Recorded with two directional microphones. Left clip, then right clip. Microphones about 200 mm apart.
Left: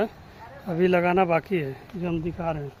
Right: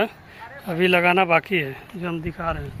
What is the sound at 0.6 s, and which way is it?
Speech, 5° left (ahead or behind).